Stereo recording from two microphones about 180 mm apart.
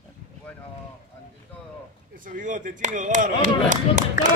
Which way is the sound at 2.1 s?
50° right (ahead or behind).